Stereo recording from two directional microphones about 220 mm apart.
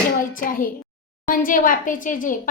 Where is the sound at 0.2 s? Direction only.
40° left (ahead or behind).